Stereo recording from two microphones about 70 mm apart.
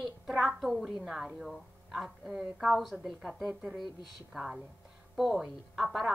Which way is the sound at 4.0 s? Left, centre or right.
Left.